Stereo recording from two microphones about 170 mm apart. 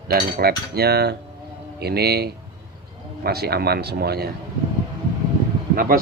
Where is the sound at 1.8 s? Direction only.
70° right (ahead or behind).